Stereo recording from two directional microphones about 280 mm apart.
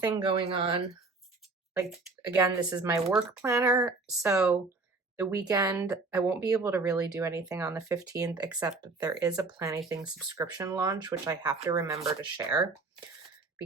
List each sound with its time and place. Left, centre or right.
0.0 s speech: centre
1.7 s speech: centre